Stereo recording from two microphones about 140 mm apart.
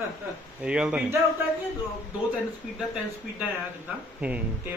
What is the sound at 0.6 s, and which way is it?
Speech, 5° right (ahead or behind).